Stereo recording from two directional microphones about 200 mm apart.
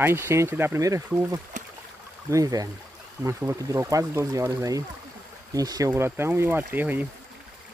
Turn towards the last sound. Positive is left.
turn(degrees=-10)  # may be behind; listen again after turning